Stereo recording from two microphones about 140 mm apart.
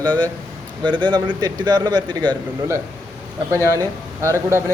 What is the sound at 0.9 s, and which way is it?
A man's voice, 35° right (ahead or behind).